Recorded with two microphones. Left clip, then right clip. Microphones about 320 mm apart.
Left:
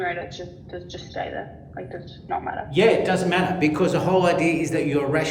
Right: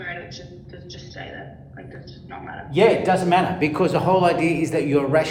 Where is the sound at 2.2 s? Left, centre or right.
Centre.